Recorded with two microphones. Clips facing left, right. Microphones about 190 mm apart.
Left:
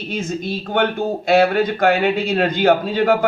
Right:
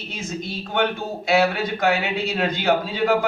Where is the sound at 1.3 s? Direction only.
50° left (ahead or behind).